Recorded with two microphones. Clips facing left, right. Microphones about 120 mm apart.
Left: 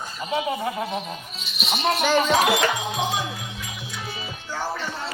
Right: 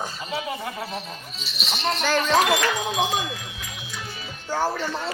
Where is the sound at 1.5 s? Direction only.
Centre (ahead or behind).